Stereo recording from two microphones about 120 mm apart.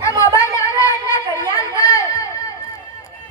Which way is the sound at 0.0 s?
25° left (ahead or behind).